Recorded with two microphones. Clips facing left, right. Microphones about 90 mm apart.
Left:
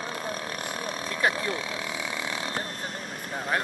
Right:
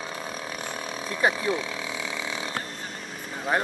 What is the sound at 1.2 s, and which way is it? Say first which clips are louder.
Speech: right 3 dB; 5° right (ahead or behind).